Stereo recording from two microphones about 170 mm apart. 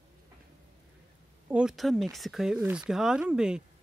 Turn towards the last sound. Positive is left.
turn(degrees=-5)  # may be behind; listen again after turning